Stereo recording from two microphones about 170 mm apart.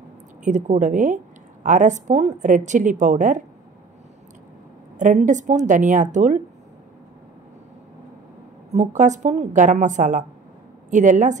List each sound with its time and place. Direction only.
0.4 s a woman's voice: 45° right (ahead or behind)
4.9 s a woman's voice: 45° right (ahead or behind)
8.7 s a woman's voice: 45° right (ahead or behind)